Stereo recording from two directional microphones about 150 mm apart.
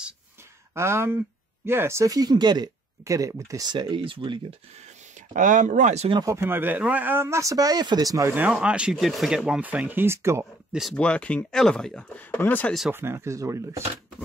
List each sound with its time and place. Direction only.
0.7 s speech: 15° right (ahead or behind); by 4.6 s 35° right (ahead or behind)
5.3 s speech: 60° right (ahead or behind)
6.2 s speech: 15° right (ahead or behind)
8.4 s speech: 5° right (ahead or behind)
10.7 s speech: centre (ahead or behind)
12.9 s speech: 15° right (ahead or behind)